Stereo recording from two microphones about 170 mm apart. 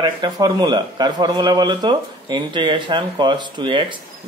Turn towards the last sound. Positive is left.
turn(degrees=-30)  # may be behind; listen again after turning